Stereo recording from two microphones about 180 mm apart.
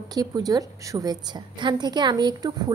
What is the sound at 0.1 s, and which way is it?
A woman's voice, 20° right (ahead or behind).